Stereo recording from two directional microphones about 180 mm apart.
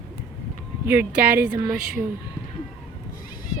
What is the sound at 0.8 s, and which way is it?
Speech, 10° right (ahead or behind).